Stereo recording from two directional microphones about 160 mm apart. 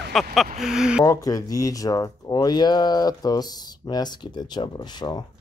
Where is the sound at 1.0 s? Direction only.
20° left (ahead or behind).